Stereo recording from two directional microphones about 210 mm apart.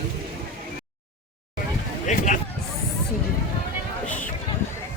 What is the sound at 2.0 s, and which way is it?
Speech, 35° left (ahead or behind).